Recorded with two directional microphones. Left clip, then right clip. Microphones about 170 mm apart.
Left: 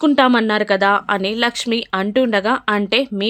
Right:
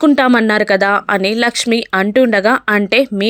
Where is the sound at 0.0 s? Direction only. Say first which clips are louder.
Right 3 dB; 20° right (ahead or behind).